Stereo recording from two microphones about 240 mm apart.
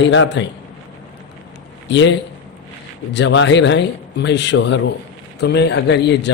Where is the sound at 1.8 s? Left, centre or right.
Left.